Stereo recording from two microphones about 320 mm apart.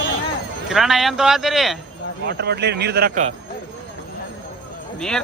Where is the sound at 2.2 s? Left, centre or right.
Right.